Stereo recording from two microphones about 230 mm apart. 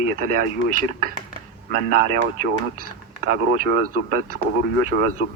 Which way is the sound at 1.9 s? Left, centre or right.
Right.